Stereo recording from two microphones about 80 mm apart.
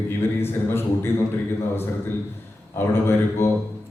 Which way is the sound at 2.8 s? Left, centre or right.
Left.